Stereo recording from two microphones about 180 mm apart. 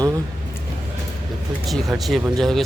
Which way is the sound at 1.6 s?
Centre (ahead or behind).